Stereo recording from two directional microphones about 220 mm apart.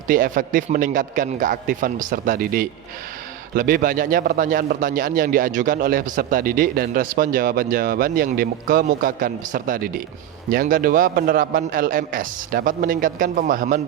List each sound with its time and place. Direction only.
0.1 s a man's voice: 40° right (ahead or behind)